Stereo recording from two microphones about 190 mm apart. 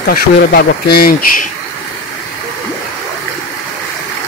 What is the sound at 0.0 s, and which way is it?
Speech, 55° left (ahead or behind).